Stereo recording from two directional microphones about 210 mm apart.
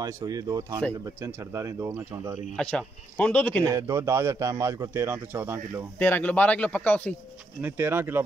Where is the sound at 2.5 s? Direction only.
5° left (ahead or behind).